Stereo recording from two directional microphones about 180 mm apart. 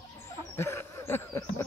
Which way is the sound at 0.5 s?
15° left (ahead or behind).